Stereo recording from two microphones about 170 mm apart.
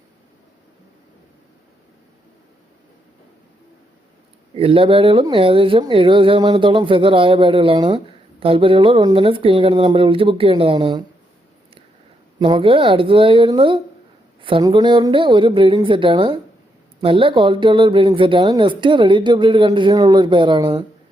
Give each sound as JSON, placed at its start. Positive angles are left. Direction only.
{"t": 4.5, "sound": "speech", "side_deg": -35}
{"t": 12.4, "sound": "speech", "side_deg": -30}